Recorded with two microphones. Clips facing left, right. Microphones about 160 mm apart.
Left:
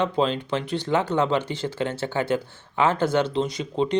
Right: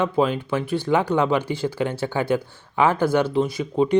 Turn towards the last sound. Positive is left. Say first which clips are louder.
# right 3 dB
turn(degrees=-10)  # may be behind; listen again after turning